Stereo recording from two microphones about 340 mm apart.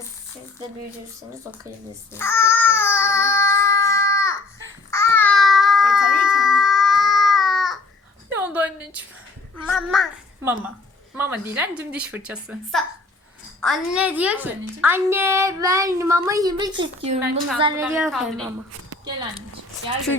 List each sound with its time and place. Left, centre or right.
2.1 s babbling: centre
8.4 s a sound: centre
11.1 s a woman's voice: centre
18.0 s a woman's voice: centre